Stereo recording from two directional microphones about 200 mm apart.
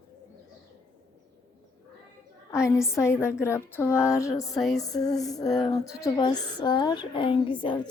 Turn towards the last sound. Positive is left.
turn(degrees=25)  # may be behind; listen again after turning